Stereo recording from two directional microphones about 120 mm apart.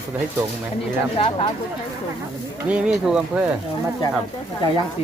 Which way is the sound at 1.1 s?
45° left (ahead or behind).